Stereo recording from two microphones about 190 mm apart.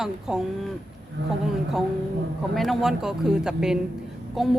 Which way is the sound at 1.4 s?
Centre (ahead or behind).